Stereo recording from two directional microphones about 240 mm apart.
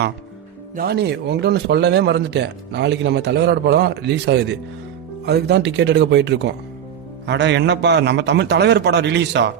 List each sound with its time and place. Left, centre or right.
0.8 s a man's voice: right